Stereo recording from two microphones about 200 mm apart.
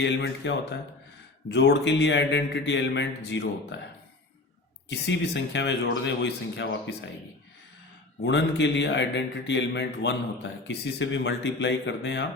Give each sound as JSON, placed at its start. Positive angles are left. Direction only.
{"t": 0.0, "sound": "a man's voice", "side_deg": 60}
{"t": 4.9, "sound": "a man's voice", "side_deg": 60}
{"t": 8.2, "sound": "a man's voice", "side_deg": 65}